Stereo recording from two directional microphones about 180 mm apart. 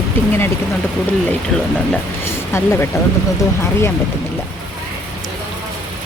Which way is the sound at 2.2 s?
15° left (ahead or behind).